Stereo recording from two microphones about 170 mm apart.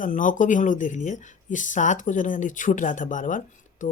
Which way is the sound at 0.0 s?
50° left (ahead or behind).